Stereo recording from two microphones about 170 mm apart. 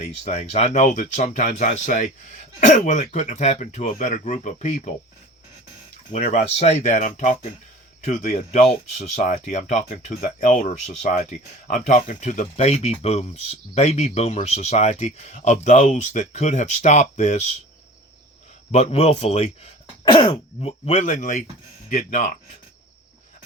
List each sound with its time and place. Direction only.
0.0 s speech: 40° left (ahead or behind)
6.2 s speech: 45° left (ahead or behind)
18.7 s speech: 40° left (ahead or behind)